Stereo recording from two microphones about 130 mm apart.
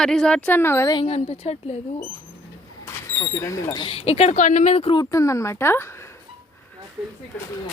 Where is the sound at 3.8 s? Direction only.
50° left (ahead or behind).